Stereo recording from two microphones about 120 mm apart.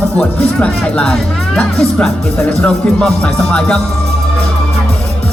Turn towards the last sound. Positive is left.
turn(degrees=10)  # may be behind; listen again after turning